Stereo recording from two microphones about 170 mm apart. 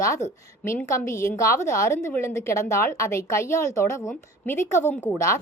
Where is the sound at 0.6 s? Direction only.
15° left (ahead or behind).